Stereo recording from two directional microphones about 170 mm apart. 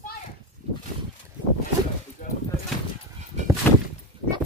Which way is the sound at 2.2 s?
50° left (ahead or behind).